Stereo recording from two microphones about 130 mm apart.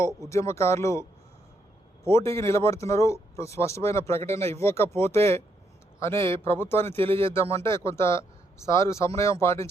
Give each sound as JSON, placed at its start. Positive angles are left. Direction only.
{"t": 0.3, "sound": "speech", "side_deg": 20}
{"t": 2.0, "sound": "speech", "side_deg": 20}